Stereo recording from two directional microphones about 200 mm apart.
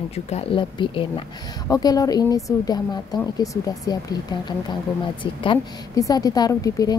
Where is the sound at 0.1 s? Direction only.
30° left (ahead or behind).